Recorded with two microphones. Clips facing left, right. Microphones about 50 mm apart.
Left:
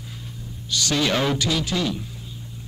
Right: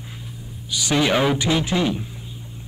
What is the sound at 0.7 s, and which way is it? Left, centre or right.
A man's voice, centre.